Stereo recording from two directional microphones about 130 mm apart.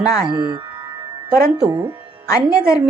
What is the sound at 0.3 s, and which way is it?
Speech, 35° right (ahead or behind).